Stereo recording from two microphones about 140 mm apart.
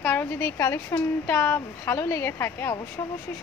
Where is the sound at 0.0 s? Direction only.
15° left (ahead or behind).